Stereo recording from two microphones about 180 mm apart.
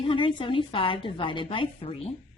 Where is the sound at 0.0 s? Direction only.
30° left (ahead or behind).